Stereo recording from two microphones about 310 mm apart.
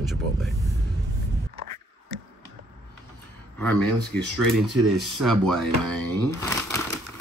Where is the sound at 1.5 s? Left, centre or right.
Right.